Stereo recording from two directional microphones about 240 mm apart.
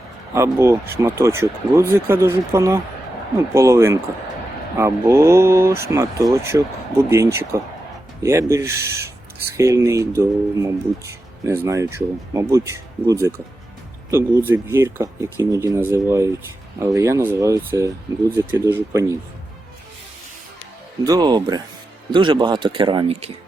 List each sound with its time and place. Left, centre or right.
0.3 s speech: centre
21.0 s speech: centre